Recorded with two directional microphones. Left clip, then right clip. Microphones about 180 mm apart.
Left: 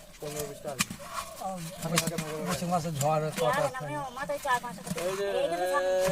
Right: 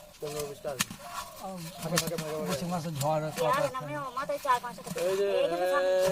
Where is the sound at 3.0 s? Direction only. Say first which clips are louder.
Right 1 dB; 30° left (ahead or behind).